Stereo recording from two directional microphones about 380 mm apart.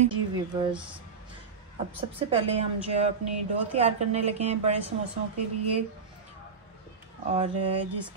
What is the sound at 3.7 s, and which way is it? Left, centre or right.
Speech, centre.